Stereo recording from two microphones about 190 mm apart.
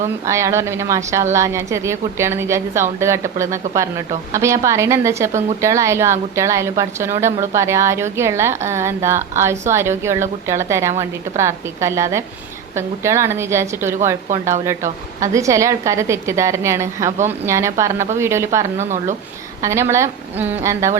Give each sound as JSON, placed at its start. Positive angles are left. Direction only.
{"t": 0.3, "sound": "a woman's voice", "side_deg": -15}
{"t": 15.2, "sound": "a woman's voice", "side_deg": -15}
{"t": 18.8, "sound": "a woman's voice", "side_deg": -40}
{"t": 19.6, "sound": "a woman's voice", "side_deg": -15}